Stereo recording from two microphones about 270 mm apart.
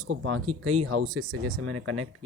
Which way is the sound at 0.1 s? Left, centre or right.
Right.